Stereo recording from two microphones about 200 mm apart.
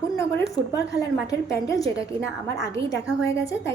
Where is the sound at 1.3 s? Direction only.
15° left (ahead or behind).